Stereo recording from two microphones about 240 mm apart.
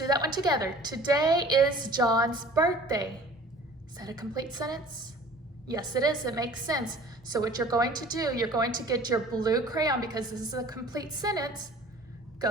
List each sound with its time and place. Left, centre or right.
0.1 s a woman's voice: centre